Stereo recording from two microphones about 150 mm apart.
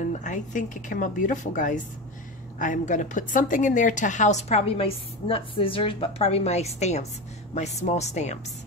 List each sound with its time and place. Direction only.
0.1 s a woman's voice: 55° left (ahead or behind)